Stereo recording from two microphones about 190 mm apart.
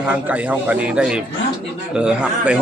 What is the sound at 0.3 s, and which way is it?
A man's voice, 5° right (ahead or behind).